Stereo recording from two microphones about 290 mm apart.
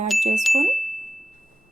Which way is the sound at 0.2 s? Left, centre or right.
Right.